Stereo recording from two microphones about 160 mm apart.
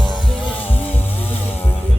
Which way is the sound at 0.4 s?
10° left (ahead or behind).